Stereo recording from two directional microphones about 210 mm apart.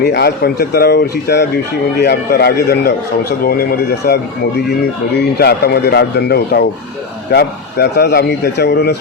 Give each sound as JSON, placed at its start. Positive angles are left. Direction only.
{"t": 0.0, "sound": "a man's voice", "side_deg": 55}